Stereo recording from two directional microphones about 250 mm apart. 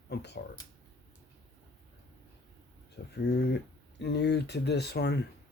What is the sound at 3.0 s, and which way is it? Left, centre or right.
Speech, left.